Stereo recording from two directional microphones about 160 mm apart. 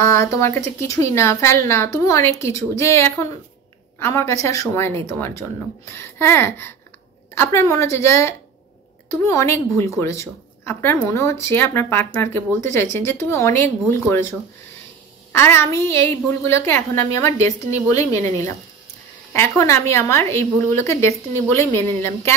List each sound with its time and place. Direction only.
0.0 s a woman's voice: 15° left (ahead or behind)
15.3 s a woman's voice: 15° left (ahead or behind)
19.3 s a woman's voice: 15° left (ahead or behind)